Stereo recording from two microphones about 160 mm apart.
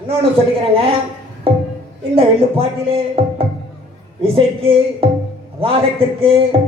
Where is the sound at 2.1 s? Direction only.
35° right (ahead or behind).